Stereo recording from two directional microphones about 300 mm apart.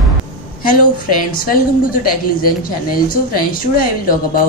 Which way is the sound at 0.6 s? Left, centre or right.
Left.